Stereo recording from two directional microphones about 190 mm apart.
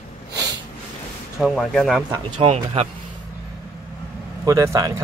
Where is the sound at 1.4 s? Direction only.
Centre (ahead or behind).